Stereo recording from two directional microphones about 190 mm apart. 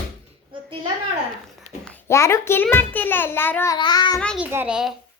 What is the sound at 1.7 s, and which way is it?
Babbling, 35° left (ahead or behind).